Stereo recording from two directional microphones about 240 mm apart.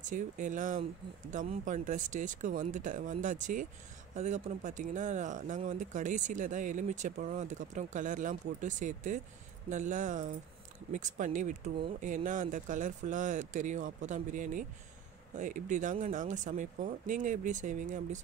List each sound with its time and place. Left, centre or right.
0.1 s speech: right